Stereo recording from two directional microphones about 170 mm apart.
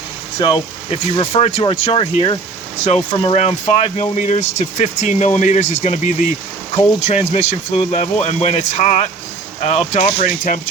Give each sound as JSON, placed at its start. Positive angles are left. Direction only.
{"t": 0.3, "sound": "speech", "side_deg": 30}